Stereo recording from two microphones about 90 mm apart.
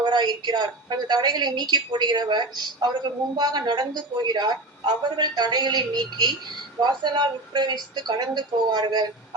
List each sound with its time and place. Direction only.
0.0 s a woman's voice: 55° right (ahead or behind)